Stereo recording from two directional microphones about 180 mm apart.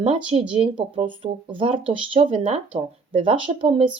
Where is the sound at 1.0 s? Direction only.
30° right (ahead or behind).